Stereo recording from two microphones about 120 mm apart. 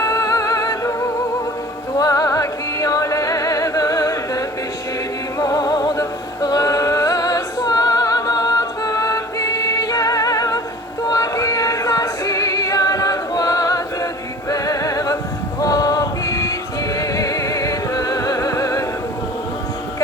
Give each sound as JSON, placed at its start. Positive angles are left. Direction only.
{"t": 0.0, "sound": "music", "side_deg": 30}
{"t": 2.0, "sound": "music", "side_deg": 30}
{"t": 11.0, "sound": "female singing", "side_deg": 30}
{"t": 14.5, "sound": "music", "side_deg": 30}
{"t": 15.6, "sound": "a sound", "side_deg": 30}
{"t": 17.0, "sound": "music", "side_deg": 30}